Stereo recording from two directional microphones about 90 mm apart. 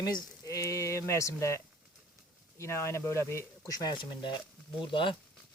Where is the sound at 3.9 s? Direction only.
60° left (ahead or behind).